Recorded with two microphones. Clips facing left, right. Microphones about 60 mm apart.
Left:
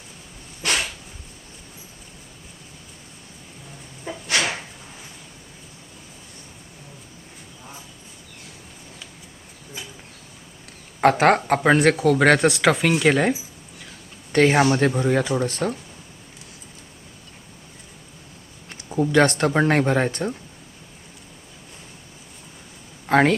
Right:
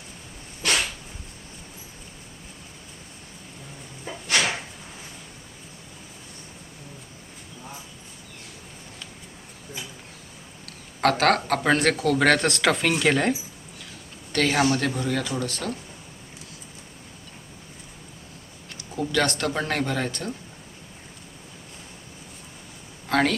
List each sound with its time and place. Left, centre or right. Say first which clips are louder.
4.0 s dog: left 1 dB; centre
11.0 s speech: left 4 dB; centre
14.3 s speech: left 5 dB; left
18.9 s speech: left 7 dB; left
23.0 s speech: left 5 dB; left